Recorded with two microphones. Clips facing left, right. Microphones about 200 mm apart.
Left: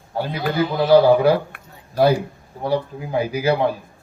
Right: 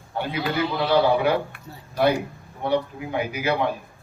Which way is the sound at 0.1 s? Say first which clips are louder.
Left 2 dB; 35° left (ahead or behind).